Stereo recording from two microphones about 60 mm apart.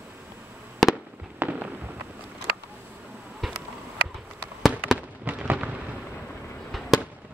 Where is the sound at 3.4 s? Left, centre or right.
Centre.